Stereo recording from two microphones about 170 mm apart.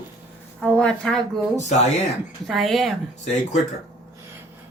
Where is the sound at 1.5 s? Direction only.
40° left (ahead or behind).